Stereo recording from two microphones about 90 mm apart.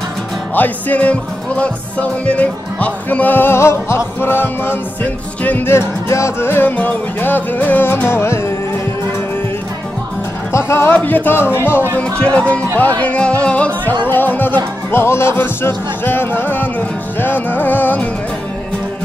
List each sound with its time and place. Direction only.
0.6 s music: 20° left (ahead or behind)
10.5 s speech: 30° left (ahead or behind)
11.0 s music: 20° left (ahead or behind)
12.0 s music: 15° left (ahead or behind)
14.0 s speech: 20° left (ahead or behind)
17.2 s music: 20° left (ahead or behind)